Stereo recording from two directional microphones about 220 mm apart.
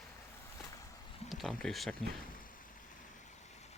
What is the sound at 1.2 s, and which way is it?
Speech, centre (ahead or behind).